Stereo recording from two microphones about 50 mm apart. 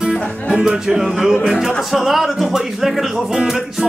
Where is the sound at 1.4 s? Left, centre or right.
Centre.